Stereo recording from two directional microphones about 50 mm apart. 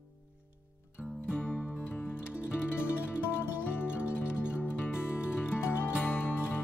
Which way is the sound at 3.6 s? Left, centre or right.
Left.